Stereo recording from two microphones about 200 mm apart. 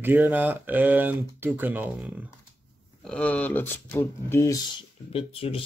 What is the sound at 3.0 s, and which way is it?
Speech, 5° left (ahead or behind).